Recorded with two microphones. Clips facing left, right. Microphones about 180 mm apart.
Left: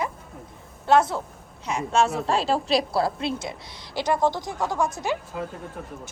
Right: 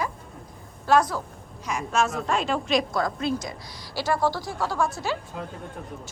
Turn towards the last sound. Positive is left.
turn(degrees=0)  # may be behind; listen again after turning